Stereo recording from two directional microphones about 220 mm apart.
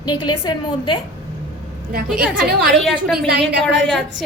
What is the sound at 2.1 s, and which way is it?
Speech, 5° right (ahead or behind).